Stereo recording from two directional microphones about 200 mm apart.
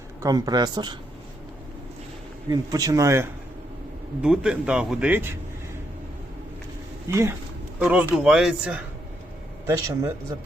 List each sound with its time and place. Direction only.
0.2 s speech: 20° right (ahead or behind)
2.5 s speech: 20° right (ahead or behind)
4.2 s speech: 5° right (ahead or behind)
7.1 s speech: 15° right (ahead or behind)
9.6 s speech: 15° right (ahead or behind)